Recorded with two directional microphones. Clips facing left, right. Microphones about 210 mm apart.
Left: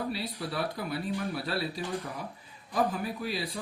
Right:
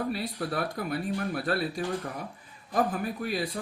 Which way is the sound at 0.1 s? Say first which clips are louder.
Right 3 dB; 50° right (ahead or behind).